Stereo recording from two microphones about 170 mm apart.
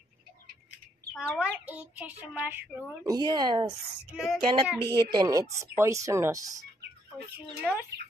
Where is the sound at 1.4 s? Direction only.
10° right (ahead or behind).